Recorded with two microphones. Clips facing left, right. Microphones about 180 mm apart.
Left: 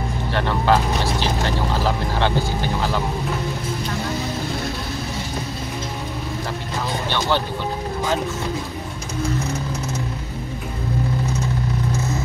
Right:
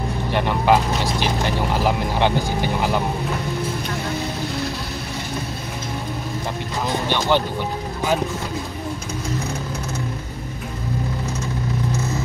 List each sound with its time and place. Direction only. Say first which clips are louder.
0.3 s vehicle: right 1 dB; 15° right (ahead or behind)
7.1 s music: right 2 dB; 15° right (ahead or behind)